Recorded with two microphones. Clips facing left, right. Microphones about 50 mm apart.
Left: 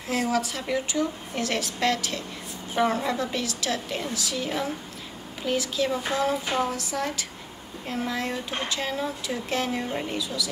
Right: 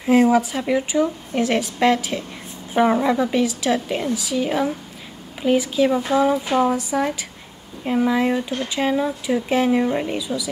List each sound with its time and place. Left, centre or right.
0.0 s a woman's voice: right